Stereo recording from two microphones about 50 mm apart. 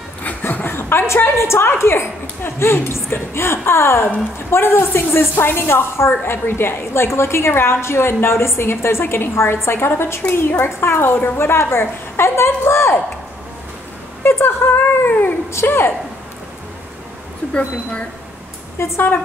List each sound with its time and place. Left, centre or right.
0.2 s a sound: left
1.7 s a woman's voice: left
14.2 s speech: left
15.6 s speech: left
18.8 s a woman's voice: left